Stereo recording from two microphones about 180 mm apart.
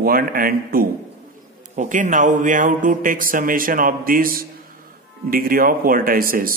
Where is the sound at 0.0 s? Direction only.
55° right (ahead or behind).